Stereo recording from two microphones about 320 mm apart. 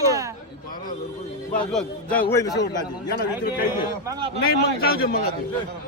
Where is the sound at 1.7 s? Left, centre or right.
Centre.